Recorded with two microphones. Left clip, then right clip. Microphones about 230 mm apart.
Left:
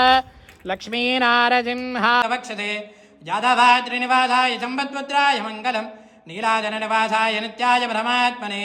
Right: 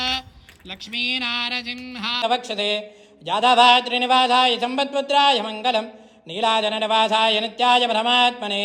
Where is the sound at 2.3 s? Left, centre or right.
Left.